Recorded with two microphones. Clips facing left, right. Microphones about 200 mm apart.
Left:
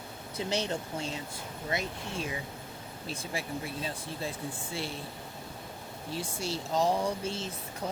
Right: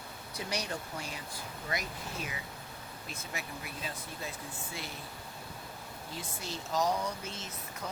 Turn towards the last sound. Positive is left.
turn(degrees=30)  # may be behind; listen again after turning